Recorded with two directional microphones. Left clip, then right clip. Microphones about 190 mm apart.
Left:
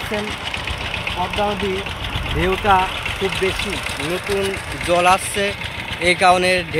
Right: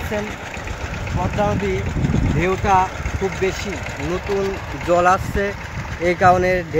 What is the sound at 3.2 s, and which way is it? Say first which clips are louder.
Speech: even; 60° right (ahead or behind).